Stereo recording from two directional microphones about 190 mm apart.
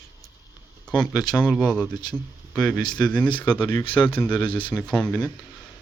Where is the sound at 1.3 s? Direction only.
5° left (ahead or behind).